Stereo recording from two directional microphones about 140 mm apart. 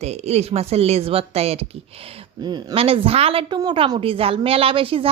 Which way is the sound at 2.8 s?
45° right (ahead or behind).